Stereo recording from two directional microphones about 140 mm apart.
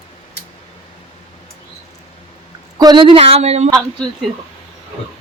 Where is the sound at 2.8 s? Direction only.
35° right (ahead or behind); by 3.7 s 50° right (ahead or behind).